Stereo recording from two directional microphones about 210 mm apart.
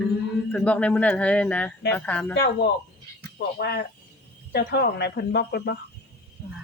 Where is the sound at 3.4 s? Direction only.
50° left (ahead or behind).